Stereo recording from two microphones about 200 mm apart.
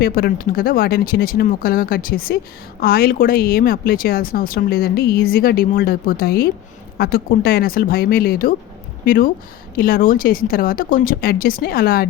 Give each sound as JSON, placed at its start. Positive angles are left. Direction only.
{"t": 0.0, "sound": "speech", "side_deg": 50}